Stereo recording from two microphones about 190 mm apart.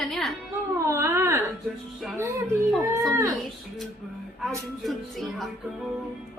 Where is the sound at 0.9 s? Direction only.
15° right (ahead or behind).